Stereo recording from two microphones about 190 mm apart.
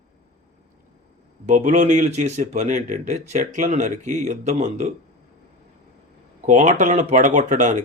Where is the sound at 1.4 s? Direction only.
40° right (ahead or behind).